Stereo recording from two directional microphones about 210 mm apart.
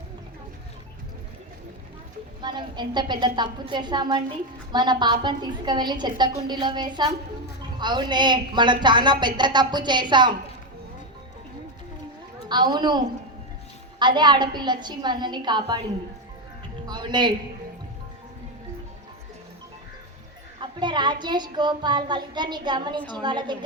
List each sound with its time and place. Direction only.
2.4 s a woman's voice: 20° right (ahead or behind)
12.5 s a woman's voice: 20° right (ahead or behind)
16.8 s music: 20° right (ahead or behind)
20.6 s a woman's voice: 20° right (ahead or behind)